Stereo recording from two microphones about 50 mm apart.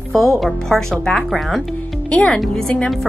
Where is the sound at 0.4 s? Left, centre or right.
Centre.